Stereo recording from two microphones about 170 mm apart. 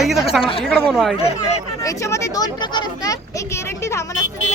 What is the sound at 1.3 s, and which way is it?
Speech, 40° left (ahead or behind).